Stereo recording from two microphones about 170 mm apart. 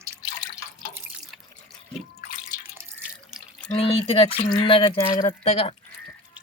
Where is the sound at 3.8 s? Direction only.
35° left (ahead or behind).